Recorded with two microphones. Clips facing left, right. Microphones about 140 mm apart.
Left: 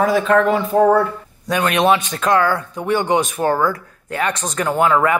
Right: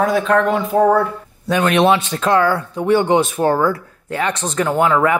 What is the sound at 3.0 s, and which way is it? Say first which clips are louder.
Speech: right 2 dB; 15° left (ahead or behind).